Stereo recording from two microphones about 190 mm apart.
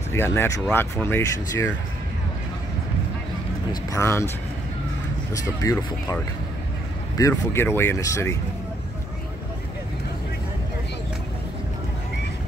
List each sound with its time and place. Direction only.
0.1 s speech: 15° left (ahead or behind)
3.9 s speech: 15° left (ahead or behind)
5.3 s speech: 20° left (ahead or behind)